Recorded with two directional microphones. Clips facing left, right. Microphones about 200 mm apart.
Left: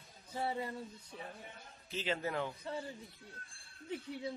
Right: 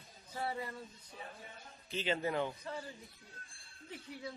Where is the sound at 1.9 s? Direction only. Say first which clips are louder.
Right 2 dB; centre (ahead or behind).